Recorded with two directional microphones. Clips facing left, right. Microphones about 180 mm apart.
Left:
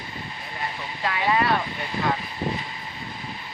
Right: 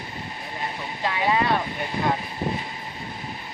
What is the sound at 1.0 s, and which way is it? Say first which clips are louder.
Speech: even; 20° right (ahead or behind).